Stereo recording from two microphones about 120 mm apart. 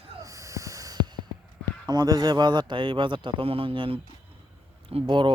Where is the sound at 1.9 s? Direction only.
35° right (ahead or behind).